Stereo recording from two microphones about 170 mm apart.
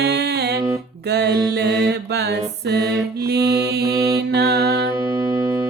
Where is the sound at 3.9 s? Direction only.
20° right (ahead or behind).